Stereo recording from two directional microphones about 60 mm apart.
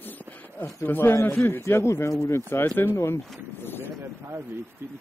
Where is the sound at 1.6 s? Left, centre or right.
Left.